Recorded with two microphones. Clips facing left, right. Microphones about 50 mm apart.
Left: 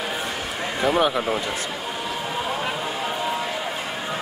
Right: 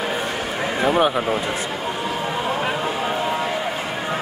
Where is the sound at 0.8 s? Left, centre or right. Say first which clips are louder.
Right 2 dB; centre.